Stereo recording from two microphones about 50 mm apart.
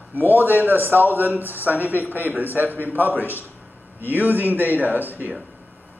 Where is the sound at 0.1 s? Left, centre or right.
Right.